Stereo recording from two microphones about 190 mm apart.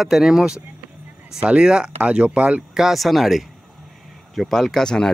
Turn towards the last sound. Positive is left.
turn(degrees=5)  # may be behind; listen again after turning